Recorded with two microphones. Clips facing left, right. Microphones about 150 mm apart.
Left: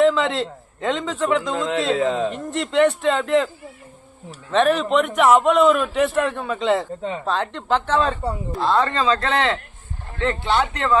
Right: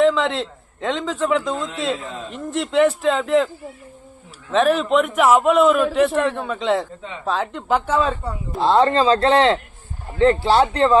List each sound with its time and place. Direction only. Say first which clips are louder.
0.0 s a man's voice: even; centre (ahead or behind)
1.5 s a man's voice: left 4 dB; 90° left
2.3 s a man's voice: right 1 dB; centre (ahead or behind)
4.5 s a man's voice: right 1 dB; centre (ahead or behind)
8.5 s speech: right 5 dB; 25° right (ahead or behind)